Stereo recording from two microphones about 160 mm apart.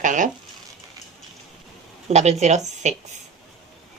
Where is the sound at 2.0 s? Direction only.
45° right (ahead or behind).